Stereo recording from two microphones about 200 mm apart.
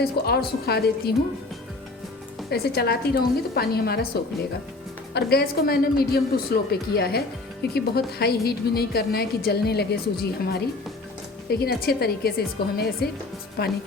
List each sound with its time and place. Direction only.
0.0 s a woman's voice: 55° left (ahead or behind)
2.5 s a woman's voice: 55° left (ahead or behind)
5.1 s a woman's voice: 50° left (ahead or behind)
11.6 s a woman's voice: 50° left (ahead or behind)